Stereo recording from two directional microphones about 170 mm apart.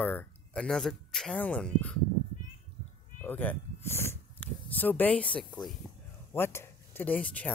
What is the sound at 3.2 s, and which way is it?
Speech, 10° left (ahead or behind).